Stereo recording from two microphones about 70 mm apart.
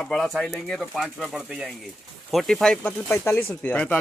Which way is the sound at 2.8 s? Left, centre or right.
Left.